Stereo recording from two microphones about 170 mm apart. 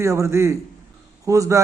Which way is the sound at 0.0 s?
15° right (ahead or behind).